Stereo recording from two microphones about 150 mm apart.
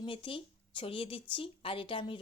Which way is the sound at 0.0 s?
35° left (ahead or behind).